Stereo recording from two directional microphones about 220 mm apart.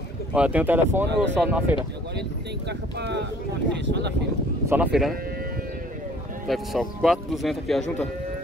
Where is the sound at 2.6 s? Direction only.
50° right (ahead or behind).